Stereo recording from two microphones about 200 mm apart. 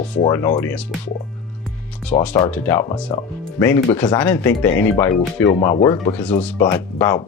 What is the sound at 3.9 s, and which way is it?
Speech, 5° left (ahead or behind).